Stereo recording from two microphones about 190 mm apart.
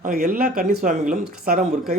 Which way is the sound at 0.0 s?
50° right (ahead or behind).